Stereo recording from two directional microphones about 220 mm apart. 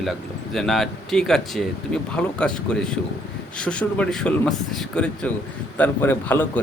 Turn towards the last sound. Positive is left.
turn(degrees=10)  # may be behind; listen again after turning